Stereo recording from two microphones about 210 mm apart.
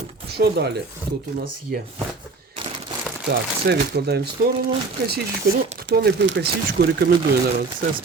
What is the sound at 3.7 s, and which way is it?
Speech, 50° right (ahead or behind).